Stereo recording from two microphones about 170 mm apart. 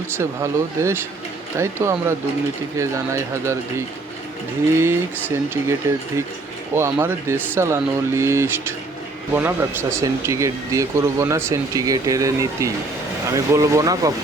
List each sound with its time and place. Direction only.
0.2 s speech: 15° right (ahead or behind)
6.7 s speech: 15° right (ahead or behind)